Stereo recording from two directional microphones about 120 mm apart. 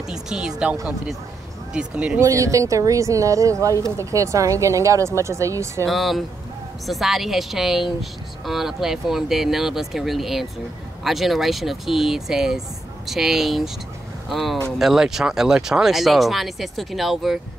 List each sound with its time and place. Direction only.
0.1 s speech: 5° right (ahead or behind)
2.1 s speech: 25° right (ahead or behind)
5.9 s speech: centre (ahead or behind)